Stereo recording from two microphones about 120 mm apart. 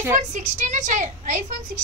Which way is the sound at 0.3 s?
90° right.